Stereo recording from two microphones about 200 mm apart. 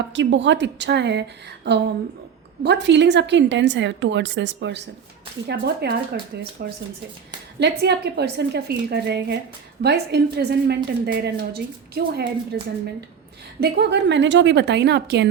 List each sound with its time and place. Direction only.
0.1 s a woman's voice: 65° right (ahead or behind)
13.6 s a woman's voice: 55° right (ahead or behind)